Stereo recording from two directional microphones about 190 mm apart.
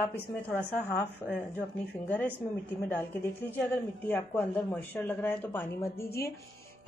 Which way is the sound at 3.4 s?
10° left (ahead or behind).